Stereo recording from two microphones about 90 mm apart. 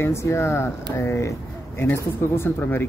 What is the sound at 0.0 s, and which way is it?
Speech, 30° left (ahead or behind).